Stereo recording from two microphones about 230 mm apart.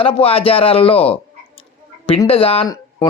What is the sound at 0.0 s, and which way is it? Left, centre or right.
Speech, left.